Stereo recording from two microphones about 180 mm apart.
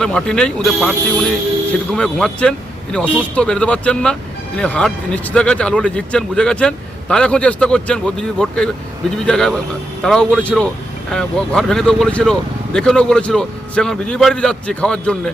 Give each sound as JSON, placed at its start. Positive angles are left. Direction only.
{"t": 0.0, "sound": "speech", "side_deg": 5}